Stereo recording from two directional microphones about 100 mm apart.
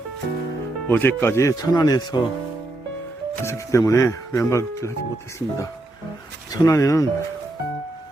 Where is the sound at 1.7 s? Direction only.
45° left (ahead or behind).